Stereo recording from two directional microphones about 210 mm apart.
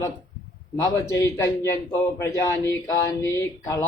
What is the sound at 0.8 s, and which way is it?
A man's voice, 15° left (ahead or behind).